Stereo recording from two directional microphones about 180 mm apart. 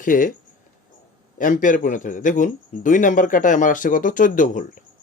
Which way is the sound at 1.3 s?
45° left (ahead or behind).